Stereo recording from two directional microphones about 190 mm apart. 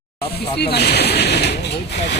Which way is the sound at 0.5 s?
60° left (ahead or behind).